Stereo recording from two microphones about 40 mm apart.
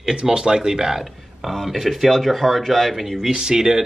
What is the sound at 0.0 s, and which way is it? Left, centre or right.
Speech, centre.